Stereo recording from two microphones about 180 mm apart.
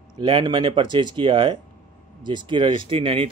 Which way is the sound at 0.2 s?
25° right (ahead or behind).